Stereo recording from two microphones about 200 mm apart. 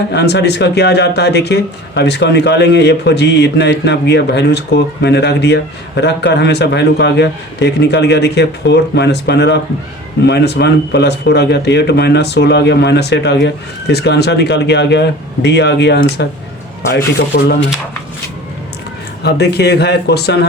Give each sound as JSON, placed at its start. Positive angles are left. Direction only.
{"t": 0.1, "sound": "speech", "side_deg": 55}
{"t": 17.3, "sound": "speech", "side_deg": 55}
{"t": 19.2, "sound": "speech", "side_deg": 55}